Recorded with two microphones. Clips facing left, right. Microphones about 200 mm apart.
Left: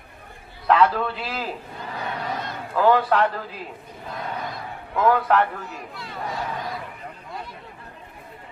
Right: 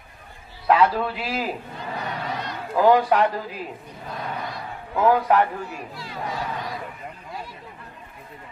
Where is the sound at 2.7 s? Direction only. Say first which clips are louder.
Right 2 dB; 15° right (ahead or behind).